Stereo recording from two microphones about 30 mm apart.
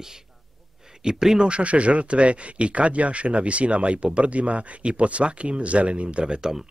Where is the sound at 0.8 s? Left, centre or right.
Right.